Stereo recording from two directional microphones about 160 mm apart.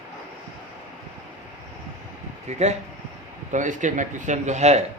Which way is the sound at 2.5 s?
45° right (ahead or behind).